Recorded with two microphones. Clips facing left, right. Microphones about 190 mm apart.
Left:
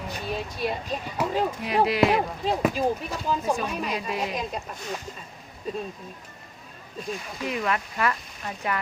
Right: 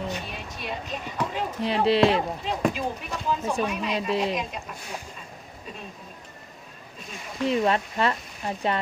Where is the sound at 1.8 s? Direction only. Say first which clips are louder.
Right 4 dB; 30° right (ahead or behind).